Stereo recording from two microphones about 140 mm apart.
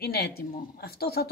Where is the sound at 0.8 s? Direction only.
90° left.